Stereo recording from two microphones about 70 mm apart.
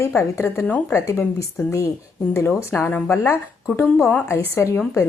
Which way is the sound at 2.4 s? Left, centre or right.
Left.